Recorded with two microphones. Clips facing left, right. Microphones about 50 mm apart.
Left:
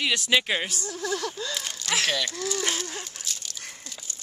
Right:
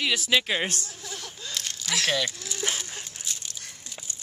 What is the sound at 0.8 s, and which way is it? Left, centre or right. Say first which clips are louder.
Speech: left 10 dB; left.